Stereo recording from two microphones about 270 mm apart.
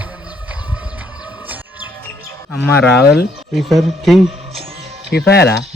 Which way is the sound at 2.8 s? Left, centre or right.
Left.